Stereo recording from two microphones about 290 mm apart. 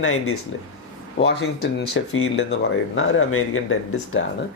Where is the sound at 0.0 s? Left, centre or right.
Left.